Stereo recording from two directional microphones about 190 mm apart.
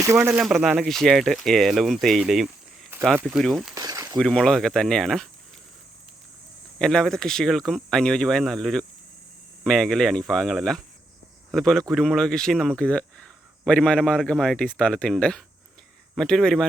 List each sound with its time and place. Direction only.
0.0 s speech: 15° right (ahead or behind)
3.8 s a sound: 15° right (ahead or behind)
4.2 s speech: centre (ahead or behind)
6.7 s speech: centre (ahead or behind)